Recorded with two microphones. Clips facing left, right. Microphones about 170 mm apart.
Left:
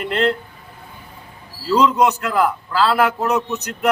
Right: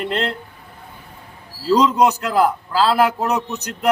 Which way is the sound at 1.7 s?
35° right (ahead or behind).